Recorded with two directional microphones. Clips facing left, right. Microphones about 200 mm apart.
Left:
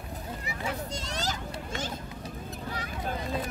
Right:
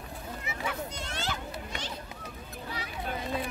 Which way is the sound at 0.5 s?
35° left (ahead or behind).